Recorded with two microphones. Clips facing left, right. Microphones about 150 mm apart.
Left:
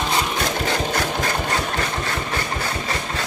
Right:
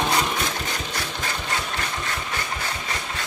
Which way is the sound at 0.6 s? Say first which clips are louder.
Left 8 dB; 70° left (ahead or behind).